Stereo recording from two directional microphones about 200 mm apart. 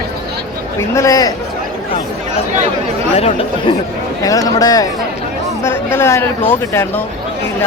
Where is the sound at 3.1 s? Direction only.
30° left (ahead or behind).